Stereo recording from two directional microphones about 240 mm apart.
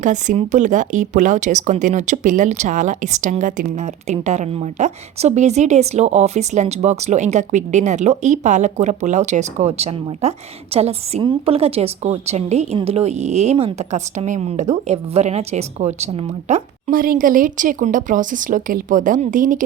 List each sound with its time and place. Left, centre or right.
0.0 s speech: right